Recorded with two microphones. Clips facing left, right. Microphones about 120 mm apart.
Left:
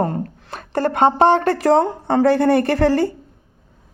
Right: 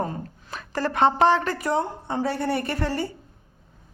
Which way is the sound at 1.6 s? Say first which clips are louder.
Left 10 dB; 90° left.